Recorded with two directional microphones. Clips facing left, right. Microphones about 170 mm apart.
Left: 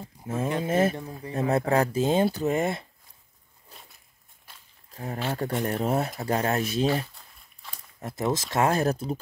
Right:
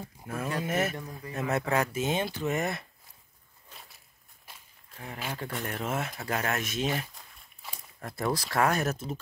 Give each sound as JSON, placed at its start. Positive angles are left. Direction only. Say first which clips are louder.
{"t": 0.3, "sound": "speech", "louder": "left 5 dB", "side_deg": 25}
{"t": 4.9, "sound": "speech", "louder": "left 7 dB", "side_deg": 40}
{"t": 8.0, "sound": "speech", "louder": "left 3 dB", "side_deg": 20}